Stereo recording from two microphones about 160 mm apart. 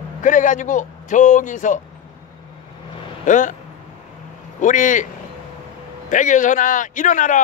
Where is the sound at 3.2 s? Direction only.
50° left (ahead or behind).